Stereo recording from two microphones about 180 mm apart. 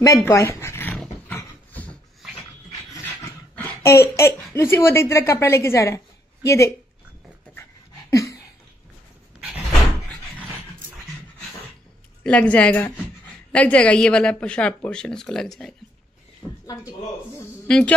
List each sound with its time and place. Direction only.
0.0 s dog: 15° left (ahead or behind)
4.6 s a woman's voice: 15° left (ahead or behind)
8.1 s a sound: 15° left (ahead or behind)
12.2 s a woman's voice: 5° left (ahead or behind)
16.4 s a sound: 5° right (ahead or behind)
17.6 s speech: 5° left (ahead or behind)